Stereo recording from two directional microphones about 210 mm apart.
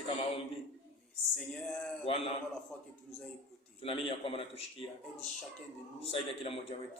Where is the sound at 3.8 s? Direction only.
25° left (ahead or behind).